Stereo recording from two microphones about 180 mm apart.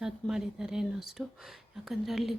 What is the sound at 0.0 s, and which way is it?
Speech, 5° right (ahead or behind).